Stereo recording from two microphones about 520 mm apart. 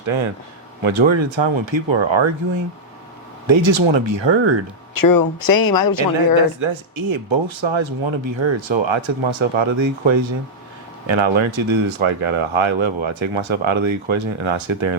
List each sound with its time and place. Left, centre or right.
0.0 s speech: right
3.4 s speech: right
4.9 s speech: left
6.6 s speech: right